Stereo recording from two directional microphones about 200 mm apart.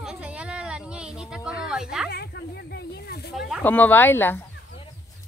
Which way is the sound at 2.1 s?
55° left (ahead or behind).